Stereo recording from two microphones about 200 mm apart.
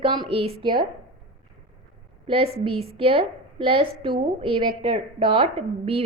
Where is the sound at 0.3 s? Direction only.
30° right (ahead or behind).